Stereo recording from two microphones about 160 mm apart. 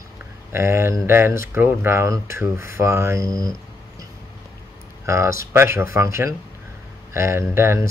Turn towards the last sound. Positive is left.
turn(degrees=-15)  # may be behind; listen again after turning